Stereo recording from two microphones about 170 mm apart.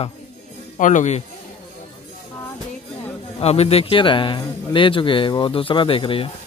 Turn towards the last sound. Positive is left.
turn(degrees=30)  # may be behind; listen again after turning